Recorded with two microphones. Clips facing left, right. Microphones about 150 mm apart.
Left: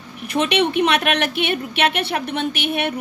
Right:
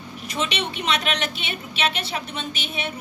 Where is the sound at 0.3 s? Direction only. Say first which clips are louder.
Left 9 dB; 60° left (ahead or behind).